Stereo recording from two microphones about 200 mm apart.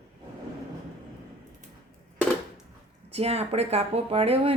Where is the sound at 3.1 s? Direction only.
30° right (ahead or behind).